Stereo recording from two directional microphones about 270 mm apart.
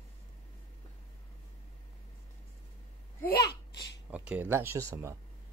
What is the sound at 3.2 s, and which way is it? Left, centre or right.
Babbling, left.